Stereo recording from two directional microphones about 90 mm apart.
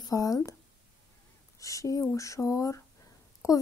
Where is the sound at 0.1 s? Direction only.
40° left (ahead or behind).